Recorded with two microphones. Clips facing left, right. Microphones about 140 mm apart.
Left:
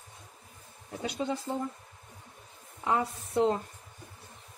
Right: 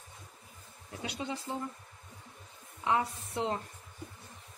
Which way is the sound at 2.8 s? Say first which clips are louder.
Left 1 dB; 45° left (ahead or behind).